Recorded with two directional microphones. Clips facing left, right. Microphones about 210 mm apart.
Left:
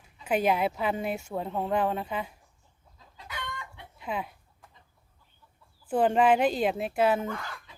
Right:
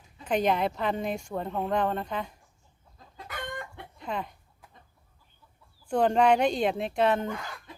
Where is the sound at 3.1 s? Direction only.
50° right (ahead or behind).